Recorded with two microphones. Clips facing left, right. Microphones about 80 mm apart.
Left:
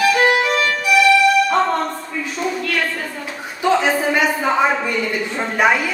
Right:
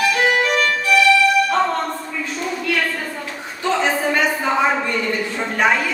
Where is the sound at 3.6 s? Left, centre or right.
Centre.